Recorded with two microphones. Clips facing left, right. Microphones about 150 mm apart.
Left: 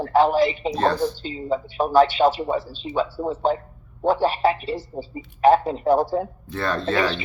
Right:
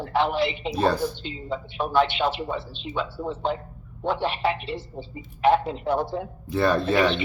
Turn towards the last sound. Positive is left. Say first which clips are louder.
# right 2 dB
turn(degrees=-10)  # may be behind; listen again after turning